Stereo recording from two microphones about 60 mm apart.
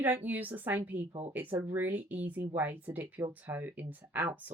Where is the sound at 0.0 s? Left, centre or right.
Right.